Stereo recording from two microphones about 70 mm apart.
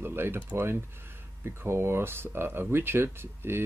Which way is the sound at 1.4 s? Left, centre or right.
Right.